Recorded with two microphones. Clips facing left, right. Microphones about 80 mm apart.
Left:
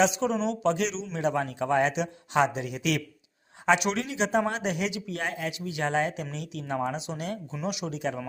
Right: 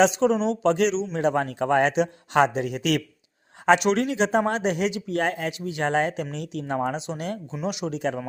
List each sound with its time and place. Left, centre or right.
0.0 s a man's voice: right